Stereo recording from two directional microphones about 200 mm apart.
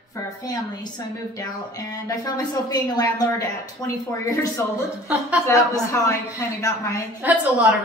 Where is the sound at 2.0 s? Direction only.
20° left (ahead or behind).